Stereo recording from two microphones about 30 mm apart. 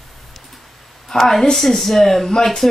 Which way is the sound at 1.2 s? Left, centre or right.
Centre.